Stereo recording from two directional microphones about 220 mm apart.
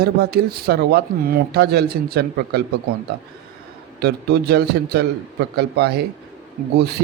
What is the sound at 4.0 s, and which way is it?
Speech, 45° right (ahead or behind).